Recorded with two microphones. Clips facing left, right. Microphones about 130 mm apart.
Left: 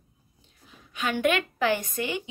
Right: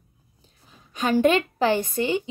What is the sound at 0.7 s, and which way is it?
A woman's voice, 35° right (ahead or behind).